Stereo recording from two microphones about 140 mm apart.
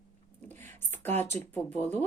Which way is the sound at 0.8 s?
15° left (ahead or behind).